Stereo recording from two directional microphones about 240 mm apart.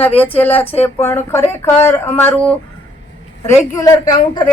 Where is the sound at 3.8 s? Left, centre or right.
Centre.